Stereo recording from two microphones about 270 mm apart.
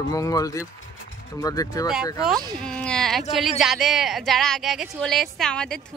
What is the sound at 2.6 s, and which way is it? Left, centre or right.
Speech, centre.